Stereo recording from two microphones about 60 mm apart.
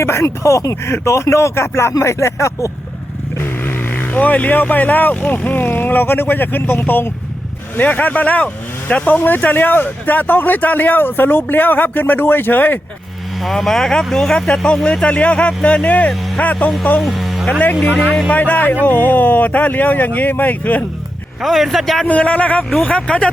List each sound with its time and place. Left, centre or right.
0.0 s speech: left
1.9 s speech: left
3.6 s speech: left
9.1 s speech: left
13.4 s a man's voice: centre
15.0 s speech: left
17.0 s a man's voice: centre
18.3 s speech: left
21.4 s a man's voice: centre
22.0 s speech: left